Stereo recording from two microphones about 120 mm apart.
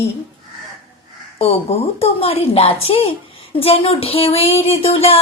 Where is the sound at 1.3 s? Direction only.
55° left (ahead or behind).